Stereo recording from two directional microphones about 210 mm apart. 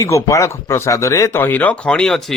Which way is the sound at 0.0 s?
15° left (ahead or behind).